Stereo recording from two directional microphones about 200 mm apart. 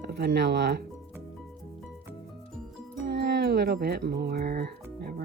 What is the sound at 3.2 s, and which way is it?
Speech, 55° right (ahead or behind).